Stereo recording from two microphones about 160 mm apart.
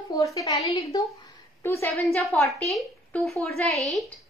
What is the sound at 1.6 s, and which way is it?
Speech, 15° left (ahead or behind).